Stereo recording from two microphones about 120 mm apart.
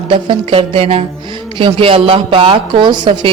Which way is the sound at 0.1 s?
45° right (ahead or behind).